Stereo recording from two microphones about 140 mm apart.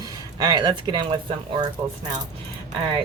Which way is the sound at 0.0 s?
30° right (ahead or behind).